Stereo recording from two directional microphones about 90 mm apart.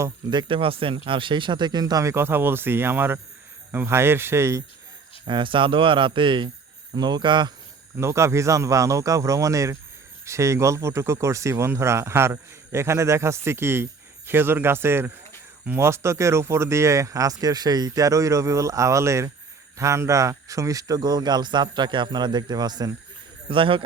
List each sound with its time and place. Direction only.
0.3 s speech: 60° right (ahead or behind); by 2.1 s 45° right (ahead or behind)
2.1 s speech: 25° right (ahead or behind)
5.2 s speech: 65° right (ahead or behind)
7.9 s speech: 30° right (ahead or behind); by 22.9 s 50° right (ahead or behind)
23.5 s speech: 75° right (ahead or behind)